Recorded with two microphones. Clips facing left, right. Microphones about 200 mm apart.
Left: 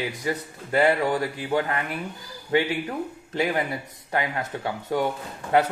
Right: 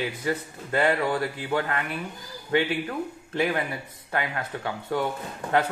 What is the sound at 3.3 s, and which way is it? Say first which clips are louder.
Speech: left 1 dB; 15° left (ahead or behind).